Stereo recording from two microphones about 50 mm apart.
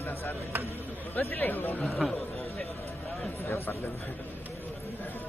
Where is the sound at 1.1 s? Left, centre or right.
Left.